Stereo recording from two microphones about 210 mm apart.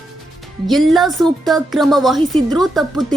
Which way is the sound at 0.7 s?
Centre (ahead or behind).